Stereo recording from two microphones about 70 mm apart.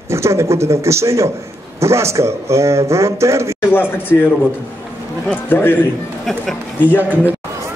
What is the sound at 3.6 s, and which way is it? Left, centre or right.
Speech, left.